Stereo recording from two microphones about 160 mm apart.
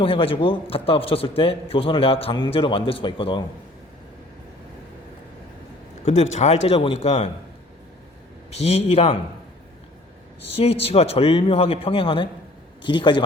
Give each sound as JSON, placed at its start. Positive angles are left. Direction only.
{"t": 0.0, "sound": "a man's voice", "side_deg": 35}
{"t": 6.1, "sound": "a man's voice", "side_deg": 45}
{"t": 8.4, "sound": "a man's voice", "side_deg": 40}
{"t": 10.5, "sound": "a man's voice", "side_deg": 40}